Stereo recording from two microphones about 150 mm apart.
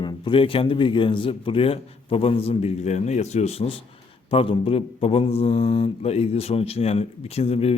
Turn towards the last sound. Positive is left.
turn(degrees=40)  # may be behind; listen again after turning